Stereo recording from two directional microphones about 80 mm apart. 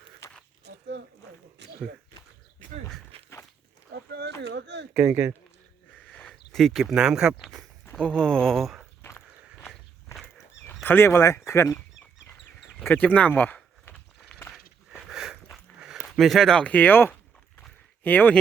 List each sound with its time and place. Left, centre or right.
5.0 s speech: right
6.2 s speech: centre
8.0 s speech: centre
9.0 s a sound: left
10.8 s speech: left
12.9 s speech: centre
15.1 s dog: centre
15.8 s a sound: centre
16.6 s speech: left